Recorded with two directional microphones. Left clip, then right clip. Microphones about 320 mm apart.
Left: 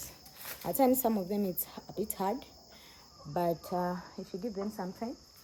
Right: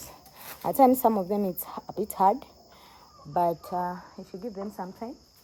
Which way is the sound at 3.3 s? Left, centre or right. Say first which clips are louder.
Right 6 dB; centre.